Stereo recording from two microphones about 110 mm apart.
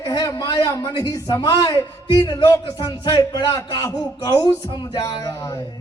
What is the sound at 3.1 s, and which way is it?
Speech, 35° left (ahead or behind).